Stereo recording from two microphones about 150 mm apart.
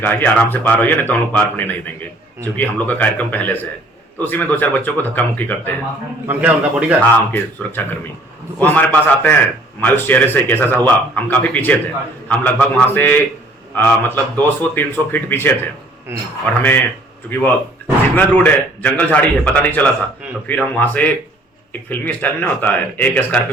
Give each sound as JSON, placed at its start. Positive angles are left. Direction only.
{"t": 0.0, "sound": "a man's voice", "side_deg": 10}
{"t": 6.2, "sound": "a man's voice", "side_deg": -10}
{"t": 7.0, "sound": "a man's voice", "side_deg": 15}
{"t": 16.6, "sound": "a man's voice", "side_deg": 15}
{"t": 18.1, "sound": "a man's voice", "side_deg": 10}